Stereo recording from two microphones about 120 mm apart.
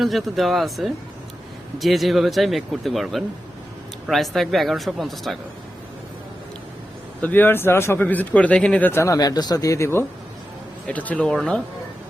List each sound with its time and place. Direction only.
0.0 s speech: centre (ahead or behind)
7.2 s speech: 15° left (ahead or behind)
8.9 s speech: 25° left (ahead or behind)